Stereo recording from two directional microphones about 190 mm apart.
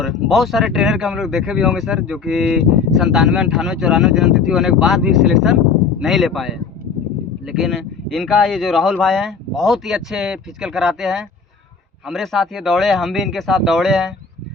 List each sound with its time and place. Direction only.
0.0 s speech: centre (ahead or behind)